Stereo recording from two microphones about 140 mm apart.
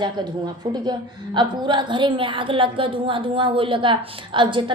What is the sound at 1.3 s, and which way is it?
A woman's voice, 35° right (ahead or behind).